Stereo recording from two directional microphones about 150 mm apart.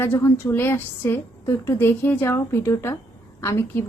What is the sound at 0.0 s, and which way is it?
A woman's voice, 15° left (ahead or behind).